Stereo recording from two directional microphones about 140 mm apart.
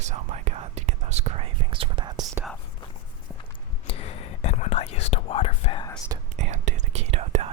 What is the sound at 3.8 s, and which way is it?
Whispering, 45° left (ahead or behind).